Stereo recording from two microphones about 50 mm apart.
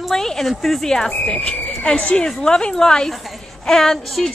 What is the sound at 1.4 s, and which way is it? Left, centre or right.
A woman's voice, left.